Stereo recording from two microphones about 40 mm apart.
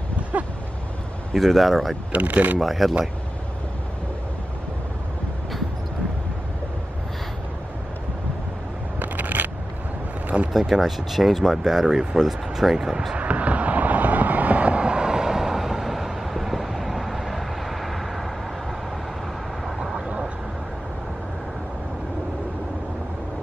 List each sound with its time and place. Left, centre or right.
0.3 s a sound: right
1.3 s speech: centre
2.1 s speech: right
2.6 s speech: centre
9.0 s a sound: right
10.5 s speech: centre
13.1 s vehicle: right; by 18.2 s centre